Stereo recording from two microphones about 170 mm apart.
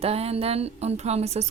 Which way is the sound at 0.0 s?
35° right (ahead or behind).